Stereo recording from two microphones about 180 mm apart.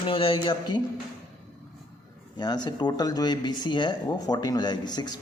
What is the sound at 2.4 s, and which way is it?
Speech, 25° left (ahead or behind).